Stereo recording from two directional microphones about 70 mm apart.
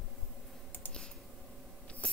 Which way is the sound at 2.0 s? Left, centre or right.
Centre.